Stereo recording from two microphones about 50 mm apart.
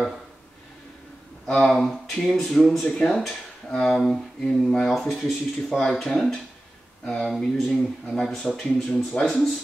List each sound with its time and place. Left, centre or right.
1.4 s speech: centre
5.8 s speech: centre